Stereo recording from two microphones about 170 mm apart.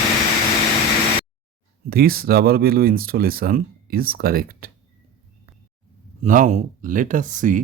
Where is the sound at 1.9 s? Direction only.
65° right (ahead or behind).